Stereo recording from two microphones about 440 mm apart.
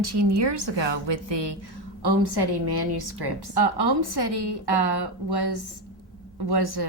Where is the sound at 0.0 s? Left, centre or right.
Right.